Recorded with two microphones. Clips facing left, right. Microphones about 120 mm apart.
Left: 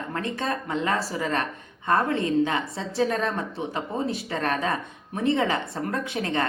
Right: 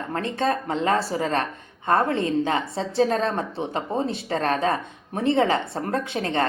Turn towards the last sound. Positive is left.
turn(degrees=-30)  # may be behind; listen again after turning